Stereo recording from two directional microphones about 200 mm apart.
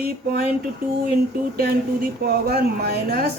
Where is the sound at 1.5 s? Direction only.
50° right (ahead or behind).